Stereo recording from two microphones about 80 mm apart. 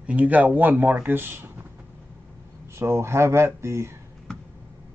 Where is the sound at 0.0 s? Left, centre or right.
Centre.